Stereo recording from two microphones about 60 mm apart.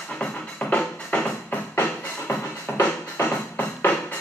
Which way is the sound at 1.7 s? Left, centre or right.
Left.